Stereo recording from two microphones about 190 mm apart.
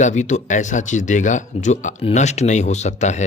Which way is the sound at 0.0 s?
40° left (ahead or behind).